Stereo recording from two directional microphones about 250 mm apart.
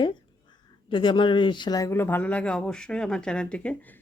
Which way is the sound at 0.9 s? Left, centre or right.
Centre.